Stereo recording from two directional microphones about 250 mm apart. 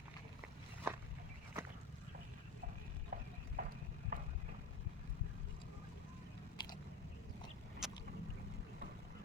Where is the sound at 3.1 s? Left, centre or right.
Right.